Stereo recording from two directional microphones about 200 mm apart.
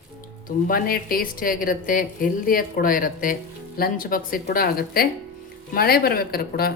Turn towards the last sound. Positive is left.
turn(degrees=50)  # may be behind; listen again after turning